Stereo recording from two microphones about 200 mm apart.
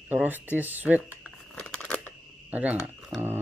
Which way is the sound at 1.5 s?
5° left (ahead or behind).